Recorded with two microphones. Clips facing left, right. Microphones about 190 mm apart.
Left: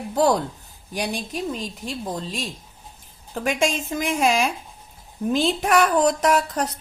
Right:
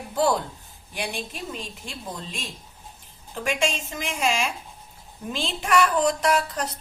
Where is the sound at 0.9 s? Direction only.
40° left (ahead or behind).